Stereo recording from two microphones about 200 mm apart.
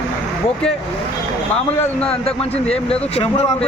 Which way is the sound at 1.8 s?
5° left (ahead or behind).